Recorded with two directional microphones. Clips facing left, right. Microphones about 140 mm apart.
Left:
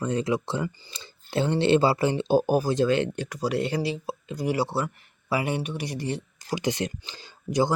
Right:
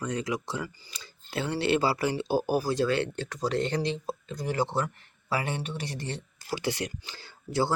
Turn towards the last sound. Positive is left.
turn(degrees=15)  # may be behind; listen again after turning